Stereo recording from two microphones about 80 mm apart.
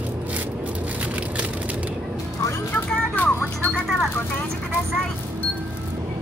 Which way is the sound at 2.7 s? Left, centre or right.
Left.